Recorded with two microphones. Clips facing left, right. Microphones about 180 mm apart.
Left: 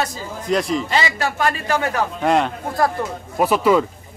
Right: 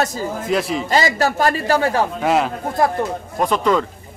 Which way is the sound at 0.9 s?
40° right (ahead or behind).